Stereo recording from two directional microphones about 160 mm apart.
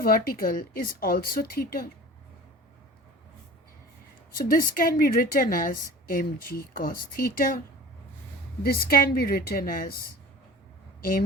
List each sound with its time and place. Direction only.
0.0 s speech: 65° left (ahead or behind)
4.4 s a woman's voice: 65° left (ahead or behind)
8.6 s speech: 70° left (ahead or behind)